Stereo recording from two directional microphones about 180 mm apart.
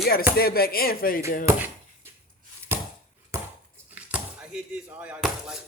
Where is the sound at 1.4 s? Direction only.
15° right (ahead or behind).